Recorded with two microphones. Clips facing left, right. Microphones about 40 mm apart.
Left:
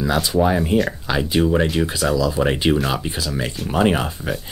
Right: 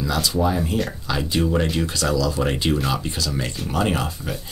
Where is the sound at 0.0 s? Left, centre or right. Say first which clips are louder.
Left 4 dB; left.